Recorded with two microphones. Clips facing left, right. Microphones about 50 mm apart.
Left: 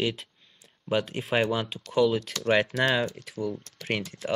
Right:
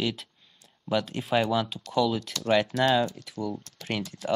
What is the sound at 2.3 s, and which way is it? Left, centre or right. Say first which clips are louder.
Speech: even; left.